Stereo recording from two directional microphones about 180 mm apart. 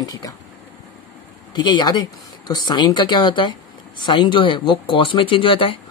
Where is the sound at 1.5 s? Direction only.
25° left (ahead or behind).